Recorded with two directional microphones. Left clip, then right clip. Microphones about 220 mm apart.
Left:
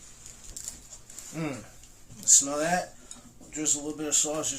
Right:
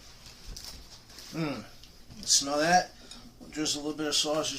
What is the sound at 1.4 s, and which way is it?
Speech, 20° left (ahead or behind).